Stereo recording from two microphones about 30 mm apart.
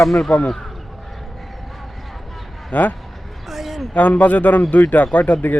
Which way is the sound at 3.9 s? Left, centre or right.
Left.